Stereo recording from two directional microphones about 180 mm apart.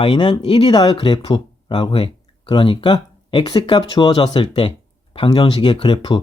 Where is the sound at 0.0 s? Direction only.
25° left (ahead or behind).